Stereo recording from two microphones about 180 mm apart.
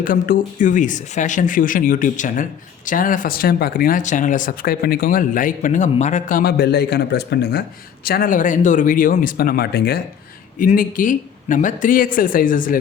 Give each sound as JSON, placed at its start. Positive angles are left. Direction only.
{"t": 0.0, "sound": "speech", "side_deg": 50}
{"t": 8.0, "sound": "speech", "side_deg": 55}
{"t": 10.6, "sound": "speech", "side_deg": 50}